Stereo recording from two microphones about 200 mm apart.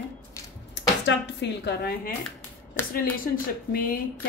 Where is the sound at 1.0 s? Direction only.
60° left (ahead or behind).